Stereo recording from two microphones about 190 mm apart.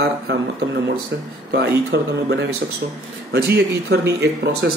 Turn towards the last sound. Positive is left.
turn(degrees=-60)  # may be behind; listen again after turning